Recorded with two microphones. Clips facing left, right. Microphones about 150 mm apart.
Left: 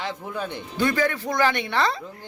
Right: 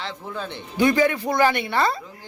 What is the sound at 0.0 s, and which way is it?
Speech, 15° left (ahead or behind).